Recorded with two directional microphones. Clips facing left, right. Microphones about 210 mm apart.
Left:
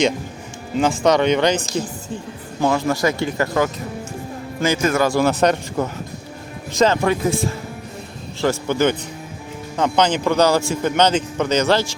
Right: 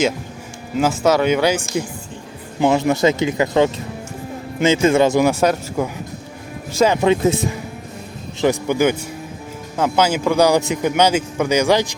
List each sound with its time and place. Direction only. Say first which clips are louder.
0.8 s a man's voice: even; 5° right (ahead or behind); by 5.3 s 20° right (ahead or behind)
5.3 s a man's voice: even; 10° right (ahead or behind)